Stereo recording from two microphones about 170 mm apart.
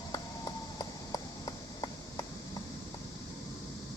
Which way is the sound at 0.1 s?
25° left (ahead or behind).